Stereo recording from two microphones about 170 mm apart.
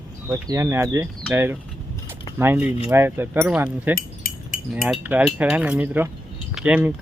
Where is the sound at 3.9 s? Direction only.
60° left (ahead or behind).